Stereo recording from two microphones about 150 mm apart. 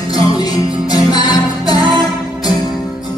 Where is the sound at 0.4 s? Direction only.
25° left (ahead or behind).